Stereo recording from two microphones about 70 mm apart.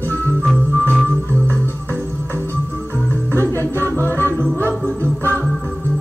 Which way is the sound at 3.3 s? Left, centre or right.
Left.